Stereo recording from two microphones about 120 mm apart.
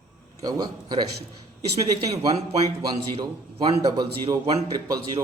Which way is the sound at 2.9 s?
45° right (ahead or behind).